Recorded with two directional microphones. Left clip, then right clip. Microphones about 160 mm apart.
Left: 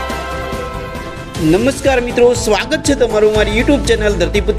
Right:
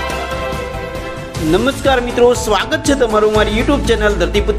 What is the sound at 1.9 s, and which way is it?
A man's voice, 50° left (ahead or behind).